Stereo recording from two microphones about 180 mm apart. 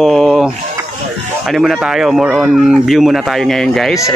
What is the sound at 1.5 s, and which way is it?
Speech, centre (ahead or behind).